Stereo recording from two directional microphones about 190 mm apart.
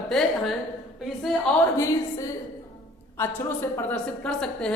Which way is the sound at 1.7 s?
15° left (ahead or behind).